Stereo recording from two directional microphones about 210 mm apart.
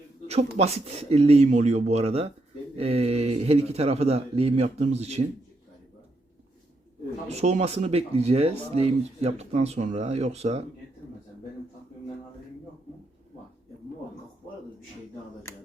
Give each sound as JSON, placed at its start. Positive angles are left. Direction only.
{"t": 0.5, "sound": "speech", "side_deg": -30}
{"t": 7.3, "sound": "speech", "side_deg": -30}